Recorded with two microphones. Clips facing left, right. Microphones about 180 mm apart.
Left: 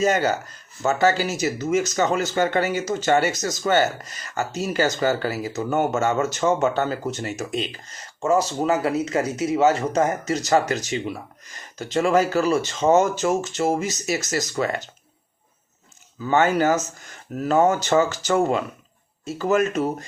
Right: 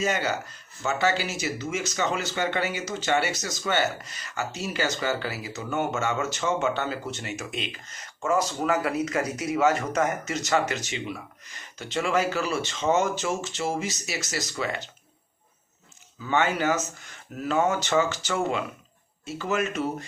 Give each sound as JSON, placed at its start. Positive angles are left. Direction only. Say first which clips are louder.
{"t": 0.0, "sound": "speech", "louder": "left 6 dB", "side_deg": 40}
{"t": 16.2, "sound": "speech", "louder": "left 6 dB", "side_deg": 40}